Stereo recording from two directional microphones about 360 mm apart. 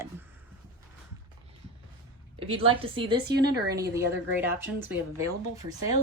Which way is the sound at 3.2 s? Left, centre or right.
Right.